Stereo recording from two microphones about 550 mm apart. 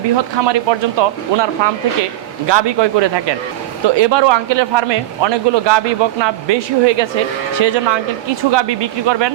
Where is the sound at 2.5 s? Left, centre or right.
Right.